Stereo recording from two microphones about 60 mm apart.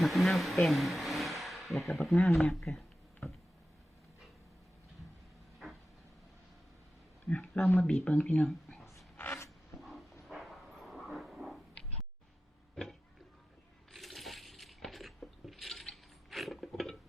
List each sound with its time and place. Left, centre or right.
0.0 s speech: centre
7.3 s speech: left
8.4 s whispering: centre
9.1 s a sound: left
9.8 s dog: centre
12.7 s a sound: centre
13.9 s coin: centre